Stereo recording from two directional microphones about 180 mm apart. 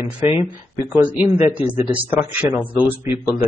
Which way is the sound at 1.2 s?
40° left (ahead or behind).